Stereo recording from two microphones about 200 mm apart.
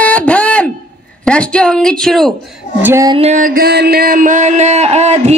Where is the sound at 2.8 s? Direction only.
10° right (ahead or behind).